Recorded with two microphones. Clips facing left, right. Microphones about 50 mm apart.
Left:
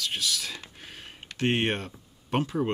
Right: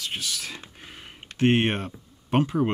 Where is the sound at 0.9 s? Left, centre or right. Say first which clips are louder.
Even; centre.